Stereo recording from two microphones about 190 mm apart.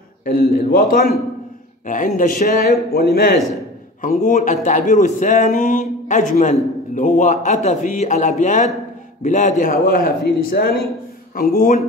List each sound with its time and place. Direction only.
0.2 s a man's voice: 50° left (ahead or behind)